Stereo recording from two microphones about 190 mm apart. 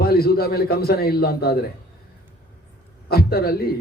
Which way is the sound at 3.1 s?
55° left (ahead or behind).